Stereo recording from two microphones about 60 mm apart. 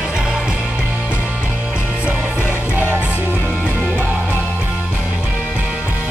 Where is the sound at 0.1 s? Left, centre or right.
Centre.